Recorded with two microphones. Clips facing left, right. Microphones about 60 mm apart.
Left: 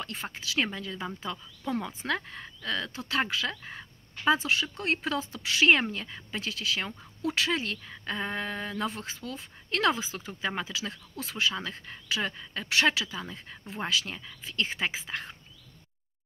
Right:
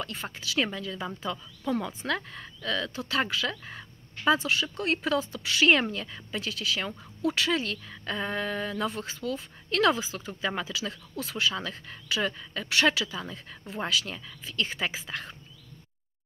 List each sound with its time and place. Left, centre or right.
0.0 s speech: left